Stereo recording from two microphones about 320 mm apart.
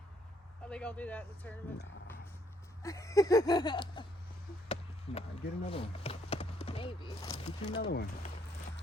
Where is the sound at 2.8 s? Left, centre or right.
Centre.